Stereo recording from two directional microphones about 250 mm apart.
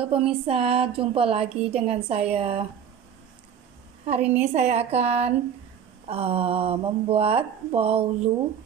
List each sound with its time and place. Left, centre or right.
0.0 s a woman's voice: right
4.0 s a woman's voice: right